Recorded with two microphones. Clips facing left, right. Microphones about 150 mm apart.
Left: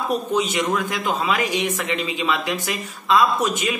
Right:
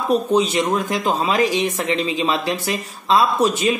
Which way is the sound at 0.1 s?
35° right (ahead or behind).